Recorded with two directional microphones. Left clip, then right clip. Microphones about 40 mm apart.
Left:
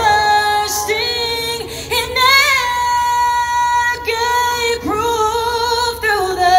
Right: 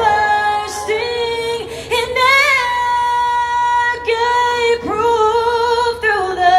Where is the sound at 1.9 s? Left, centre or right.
Centre.